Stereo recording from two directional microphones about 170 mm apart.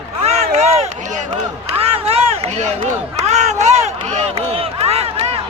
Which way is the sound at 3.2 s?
40° right (ahead or behind).